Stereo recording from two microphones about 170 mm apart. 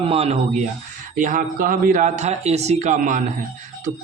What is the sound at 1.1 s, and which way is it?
A man's voice, 50° right (ahead or behind).